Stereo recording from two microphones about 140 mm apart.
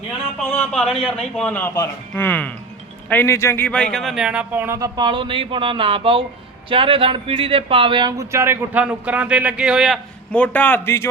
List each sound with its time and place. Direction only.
0.5 s speech: 10° left (ahead or behind)
3.9 s speech: centre (ahead or behind); by 4.9 s 20° right (ahead or behind)
4.9 s speech: 35° right (ahead or behind)
8.2 s speech: 20° right (ahead or behind); by 10.0 s 5° right (ahead or behind)
10.3 s speech: 10° left (ahead or behind)